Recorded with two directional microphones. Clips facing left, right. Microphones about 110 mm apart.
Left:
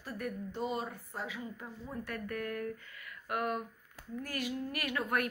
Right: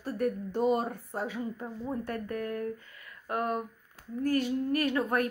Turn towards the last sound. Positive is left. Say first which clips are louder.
# right 7 dB
turn(degrees=-30)  # may be behind; listen again after turning